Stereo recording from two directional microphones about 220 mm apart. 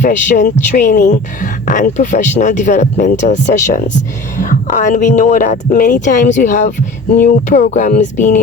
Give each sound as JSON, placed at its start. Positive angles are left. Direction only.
{"t": 0.0, "sound": "speech", "side_deg": 35}